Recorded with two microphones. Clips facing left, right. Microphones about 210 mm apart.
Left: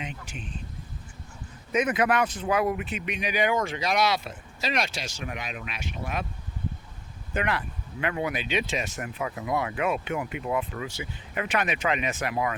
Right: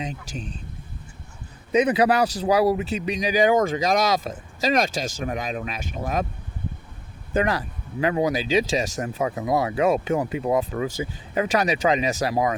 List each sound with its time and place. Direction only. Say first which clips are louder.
0.0 s speech: right 6 dB; 40° right (ahead or behind)
1.7 s speech: right 5 dB; 35° right (ahead or behind)
7.3 s speech: right 6 dB; 40° right (ahead or behind)